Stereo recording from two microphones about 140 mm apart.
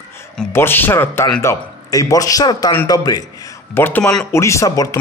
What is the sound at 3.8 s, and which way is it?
A man's voice, 15° left (ahead or behind).